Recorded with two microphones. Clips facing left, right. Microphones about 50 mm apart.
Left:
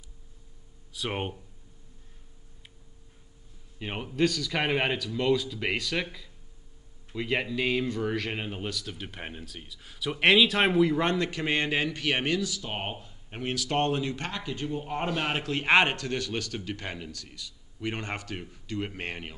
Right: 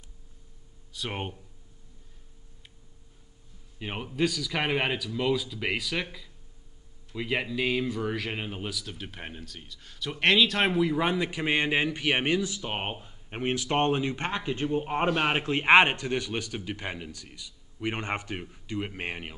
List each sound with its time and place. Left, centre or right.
0.9 s speech: centre
3.8 s speech: centre